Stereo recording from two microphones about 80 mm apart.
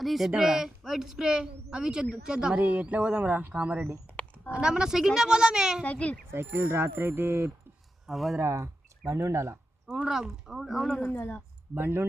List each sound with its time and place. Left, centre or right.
0.0 s a woman's voice: centre
5.8 s a child's voice: centre
6.3 s speech: right
8.0 s speech: centre
8.4 s speech: right
9.8 s speech: centre
11.1 s speech: left
11.7 s speech: right